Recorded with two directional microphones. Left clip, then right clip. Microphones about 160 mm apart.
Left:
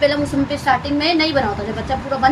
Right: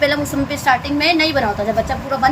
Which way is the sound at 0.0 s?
25° right (ahead or behind).